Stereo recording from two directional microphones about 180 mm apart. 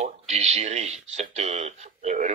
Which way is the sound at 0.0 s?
35° right (ahead or behind).